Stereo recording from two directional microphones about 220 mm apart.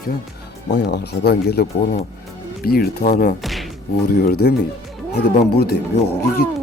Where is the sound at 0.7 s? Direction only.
45° left (ahead or behind).